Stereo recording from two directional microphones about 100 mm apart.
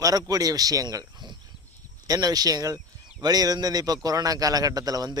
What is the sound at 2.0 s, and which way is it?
A man's voice, 40° right (ahead or behind).